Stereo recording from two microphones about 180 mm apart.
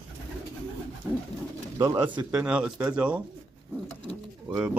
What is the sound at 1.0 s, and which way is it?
Speech, 5° right (ahead or behind).